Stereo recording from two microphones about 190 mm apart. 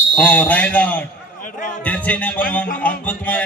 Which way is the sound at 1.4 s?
45° left (ahead or behind).